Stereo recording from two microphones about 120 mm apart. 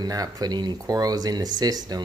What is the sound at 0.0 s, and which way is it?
Speech, 30° right (ahead or behind).